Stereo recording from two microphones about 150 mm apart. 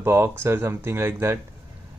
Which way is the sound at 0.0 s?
15° right (ahead or behind).